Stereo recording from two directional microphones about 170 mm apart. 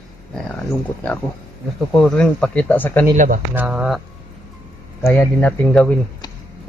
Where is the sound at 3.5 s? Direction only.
10° right (ahead or behind).